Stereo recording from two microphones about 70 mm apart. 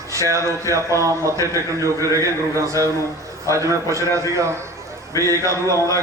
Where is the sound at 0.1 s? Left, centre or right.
Right.